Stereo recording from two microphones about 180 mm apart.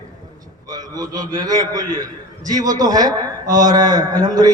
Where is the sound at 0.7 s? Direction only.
20° right (ahead or behind).